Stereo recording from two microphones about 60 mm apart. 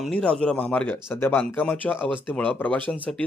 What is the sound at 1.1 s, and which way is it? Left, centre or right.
Speech, left.